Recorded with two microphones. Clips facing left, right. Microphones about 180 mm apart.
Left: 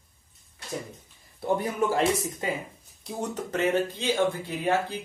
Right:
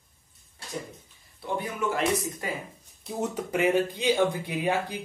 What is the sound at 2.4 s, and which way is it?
Speech, 20° left (ahead or behind).